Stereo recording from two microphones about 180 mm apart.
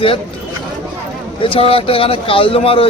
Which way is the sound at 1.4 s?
30° left (ahead or behind).